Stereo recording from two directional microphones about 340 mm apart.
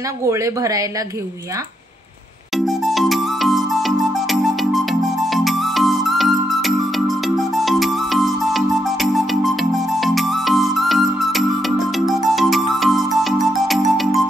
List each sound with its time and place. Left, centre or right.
0.2 s speech: centre
2.5 s music: centre